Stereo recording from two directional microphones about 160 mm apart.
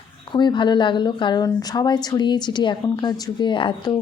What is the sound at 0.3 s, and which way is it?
A woman's voice, 30° left (ahead or behind).